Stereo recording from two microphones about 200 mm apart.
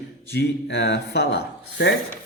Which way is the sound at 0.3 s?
60° left (ahead or behind).